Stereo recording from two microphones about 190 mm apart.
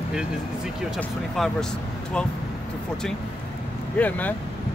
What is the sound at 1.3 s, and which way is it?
Speech, centre (ahead or behind).